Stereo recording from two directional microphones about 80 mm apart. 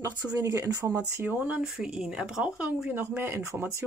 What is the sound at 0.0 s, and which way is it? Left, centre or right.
Speech, right.